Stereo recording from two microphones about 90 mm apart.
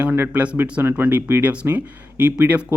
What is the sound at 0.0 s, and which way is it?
Speech, 15° right (ahead or behind).